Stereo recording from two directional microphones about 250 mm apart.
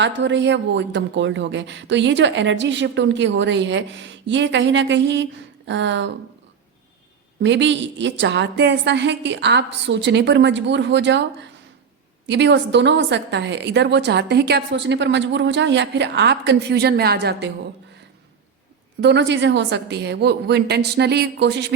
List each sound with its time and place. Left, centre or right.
0.0 s a woman's voice: right
7.4 s a woman's voice: right
12.2 s a woman's voice: right
18.9 s a woman's voice: right